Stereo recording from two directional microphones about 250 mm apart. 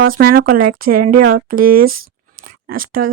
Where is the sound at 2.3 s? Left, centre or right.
Right.